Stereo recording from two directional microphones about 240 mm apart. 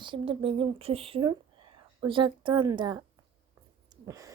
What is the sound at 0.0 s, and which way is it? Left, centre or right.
A woman's voice, right.